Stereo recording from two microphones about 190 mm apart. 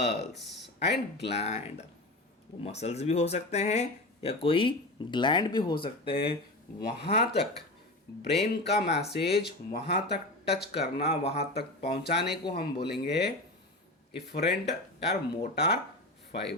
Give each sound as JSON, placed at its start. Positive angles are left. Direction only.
{"t": 0.0, "sound": "speech", "side_deg": 60}
{"t": 1.3, "sound": "speech", "side_deg": 35}
{"t": 7.2, "sound": "speech", "side_deg": 60}
{"t": 10.7, "sound": "speech", "side_deg": 35}
{"t": 11.5, "sound": "speech", "side_deg": 60}